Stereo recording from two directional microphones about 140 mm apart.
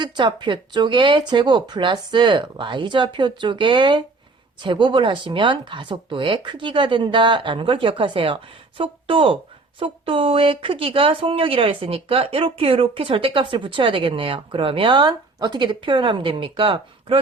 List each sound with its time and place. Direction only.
0.0 s speech: 30° right (ahead or behind)